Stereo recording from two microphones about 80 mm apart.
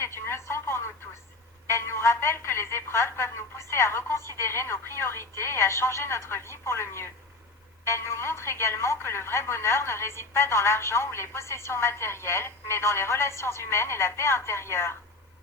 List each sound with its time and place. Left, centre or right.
0.0 s telephone: left
1.6 s a woman's voice: left